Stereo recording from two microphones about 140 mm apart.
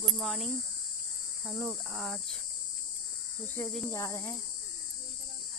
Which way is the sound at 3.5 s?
5° left (ahead or behind).